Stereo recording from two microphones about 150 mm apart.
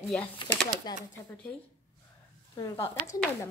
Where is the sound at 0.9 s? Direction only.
25° left (ahead or behind).